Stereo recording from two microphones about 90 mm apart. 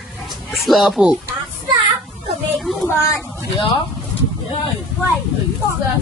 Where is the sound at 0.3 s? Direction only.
Centre (ahead or behind).